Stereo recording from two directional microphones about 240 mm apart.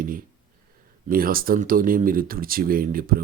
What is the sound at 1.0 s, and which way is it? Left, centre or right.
Speech, right.